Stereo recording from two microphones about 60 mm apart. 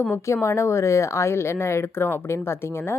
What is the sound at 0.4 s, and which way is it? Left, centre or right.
A woman's voice, left.